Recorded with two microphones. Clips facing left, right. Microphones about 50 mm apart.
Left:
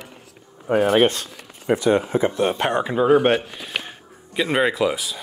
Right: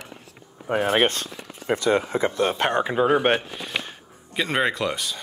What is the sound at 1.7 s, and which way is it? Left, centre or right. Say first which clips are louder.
Speech: left 3 dB; right.